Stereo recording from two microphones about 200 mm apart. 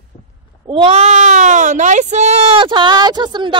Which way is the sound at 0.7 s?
30° right (ahead or behind).